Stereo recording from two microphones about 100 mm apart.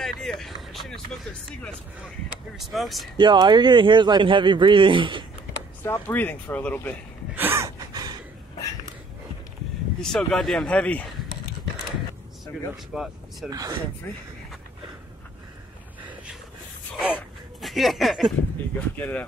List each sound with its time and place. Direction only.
0.0 s a sound: 5° left (ahead or behind)
2.5 s speech: centre (ahead or behind)
3.2 s speech: 50° right (ahead or behind)
5.9 s speech: 20° left (ahead or behind)
7.3 s gasp: 20° right (ahead or behind)
7.6 s gasp: 40° right (ahead or behind)
10.0 s speech: 5° left (ahead or behind)
12.9 s speech: 5° right (ahead or behind)
13.5 s speech: 40° right (ahead or behind)
17.6 s speech: centre (ahead or behind)
18.8 s speech: 15° left (ahead or behind)